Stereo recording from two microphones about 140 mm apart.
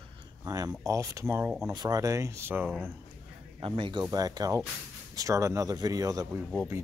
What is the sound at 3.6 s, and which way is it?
Speech, 40° right (ahead or behind).